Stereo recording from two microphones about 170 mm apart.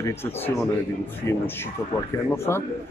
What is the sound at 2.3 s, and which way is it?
Speech, 15° left (ahead or behind).